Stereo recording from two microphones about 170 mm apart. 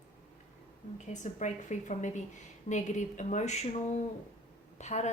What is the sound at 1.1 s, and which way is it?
A woman's voice, 45° left (ahead or behind).